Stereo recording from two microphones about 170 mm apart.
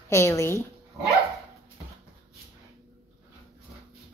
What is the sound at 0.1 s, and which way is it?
Speech, 15° left (ahead or behind).